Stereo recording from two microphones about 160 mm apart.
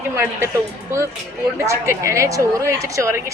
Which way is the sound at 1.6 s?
15° right (ahead or behind).